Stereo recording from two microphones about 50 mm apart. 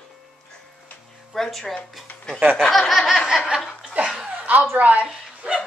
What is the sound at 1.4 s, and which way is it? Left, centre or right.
A woman's voice, centre.